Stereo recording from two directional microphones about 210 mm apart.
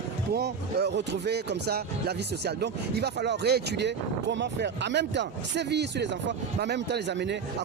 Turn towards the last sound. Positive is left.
turn(degrees=-55)  # may be behind; listen again after turning